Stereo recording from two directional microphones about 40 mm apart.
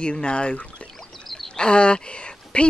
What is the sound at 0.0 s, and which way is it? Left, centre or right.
Speech, left.